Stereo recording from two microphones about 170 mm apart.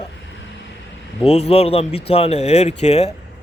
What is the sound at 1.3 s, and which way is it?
Speech, 40° left (ahead or behind).